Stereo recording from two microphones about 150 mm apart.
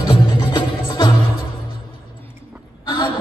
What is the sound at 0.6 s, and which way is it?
Music, 30° left (ahead or behind).